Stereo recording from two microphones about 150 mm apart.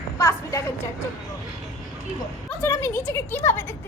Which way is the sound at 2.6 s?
15° left (ahead or behind).